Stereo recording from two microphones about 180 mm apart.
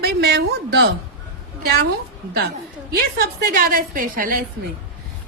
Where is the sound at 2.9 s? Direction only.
60° right (ahead or behind).